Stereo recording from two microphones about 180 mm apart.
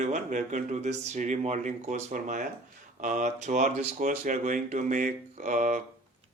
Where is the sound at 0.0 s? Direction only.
40° right (ahead or behind).